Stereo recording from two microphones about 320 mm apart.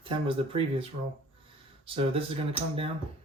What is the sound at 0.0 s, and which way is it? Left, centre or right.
Speech, centre.